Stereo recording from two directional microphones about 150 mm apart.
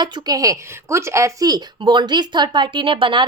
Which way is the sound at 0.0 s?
25° right (ahead or behind).